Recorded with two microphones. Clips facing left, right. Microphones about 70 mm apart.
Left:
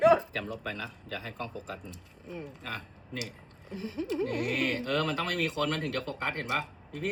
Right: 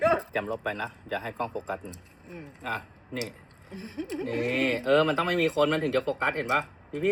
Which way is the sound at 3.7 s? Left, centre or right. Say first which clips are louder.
Left 2 dB; right.